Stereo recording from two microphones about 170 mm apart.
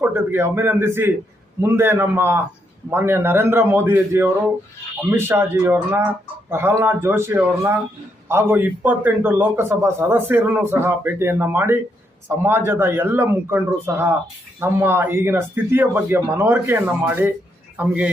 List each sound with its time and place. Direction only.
0.0 s a man's voice: 15° right (ahead or behind)